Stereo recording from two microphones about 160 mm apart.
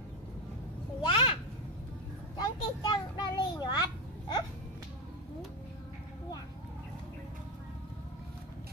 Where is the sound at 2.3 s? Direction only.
30° left (ahead or behind).